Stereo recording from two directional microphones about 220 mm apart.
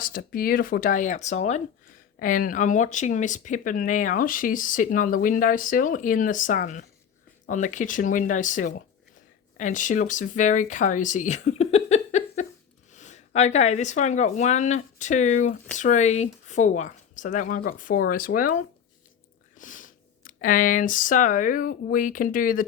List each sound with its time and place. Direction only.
0.0 s speech: 40° left (ahead or behind)